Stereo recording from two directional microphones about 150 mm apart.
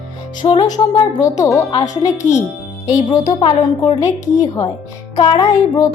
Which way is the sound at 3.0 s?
30° left (ahead or behind).